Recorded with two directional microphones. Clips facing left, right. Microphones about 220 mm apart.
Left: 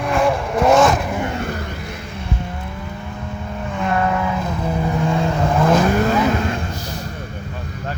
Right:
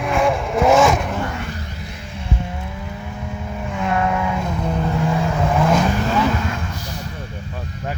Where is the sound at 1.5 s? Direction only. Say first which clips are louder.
Left 5 dB; 70° left (ahead or behind).